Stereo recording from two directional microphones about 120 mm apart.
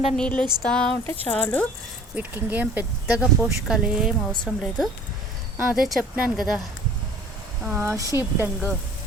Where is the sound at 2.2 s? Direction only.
15° right (ahead or behind).